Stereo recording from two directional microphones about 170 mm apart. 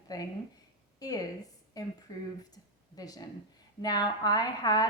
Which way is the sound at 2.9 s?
20° left (ahead or behind).